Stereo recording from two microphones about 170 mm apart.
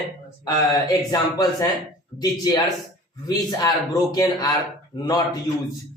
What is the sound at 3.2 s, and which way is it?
A man's voice, 20° left (ahead or behind).